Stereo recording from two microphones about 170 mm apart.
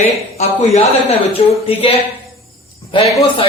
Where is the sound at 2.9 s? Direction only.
30° left (ahead or behind).